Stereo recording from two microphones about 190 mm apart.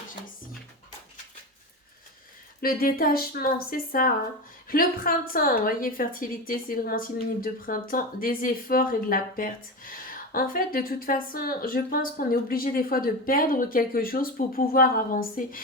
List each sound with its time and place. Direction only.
2.6 s a woman's voice: 50° left (ahead or behind)